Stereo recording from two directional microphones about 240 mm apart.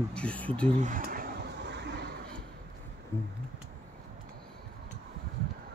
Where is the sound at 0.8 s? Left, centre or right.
Right.